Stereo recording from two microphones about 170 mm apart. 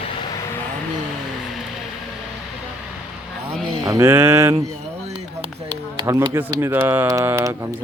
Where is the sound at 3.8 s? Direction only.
20° right (ahead or behind).